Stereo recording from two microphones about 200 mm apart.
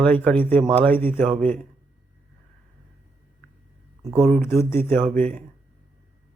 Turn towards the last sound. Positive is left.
turn(degrees=5)  # may be behind; listen again after turning